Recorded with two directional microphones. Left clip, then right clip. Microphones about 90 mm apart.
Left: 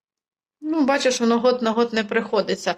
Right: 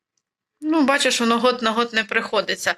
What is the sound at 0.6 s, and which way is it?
Speech, 5° left (ahead or behind).